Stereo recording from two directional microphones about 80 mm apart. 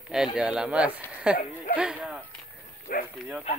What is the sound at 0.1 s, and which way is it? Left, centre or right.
Speech, centre.